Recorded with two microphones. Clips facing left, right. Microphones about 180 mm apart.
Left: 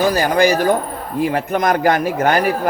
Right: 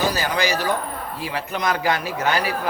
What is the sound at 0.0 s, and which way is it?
A man's voice, 50° left (ahead or behind).